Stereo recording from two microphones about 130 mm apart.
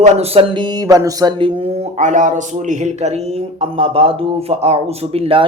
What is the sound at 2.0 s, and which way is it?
A man's voice, 70° right (ahead or behind).